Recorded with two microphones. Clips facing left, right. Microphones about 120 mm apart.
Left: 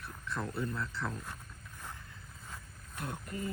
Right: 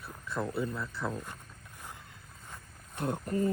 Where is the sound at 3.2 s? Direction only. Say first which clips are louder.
Right 11 dB; 40° right (ahead or behind).